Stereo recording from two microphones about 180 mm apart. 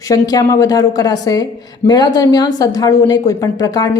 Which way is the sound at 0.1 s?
20° left (ahead or behind).